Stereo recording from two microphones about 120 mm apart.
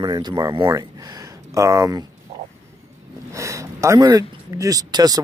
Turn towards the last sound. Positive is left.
turn(degrees=-30)  # may be behind; listen again after turning